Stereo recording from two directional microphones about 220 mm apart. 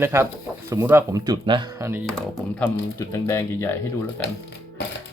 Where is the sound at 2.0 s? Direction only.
Centre (ahead or behind).